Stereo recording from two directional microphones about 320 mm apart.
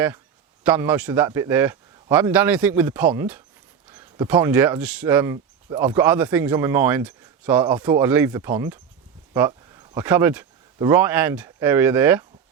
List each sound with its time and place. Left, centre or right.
0.6 s a man's voice: centre